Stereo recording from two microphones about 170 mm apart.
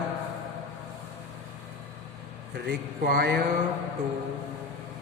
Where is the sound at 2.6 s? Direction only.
65° right (ahead or behind).